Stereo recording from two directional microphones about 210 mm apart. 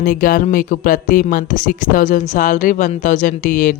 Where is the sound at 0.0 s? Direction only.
40° left (ahead or behind).